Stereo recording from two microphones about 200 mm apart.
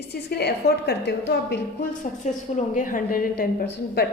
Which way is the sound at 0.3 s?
55° left (ahead or behind).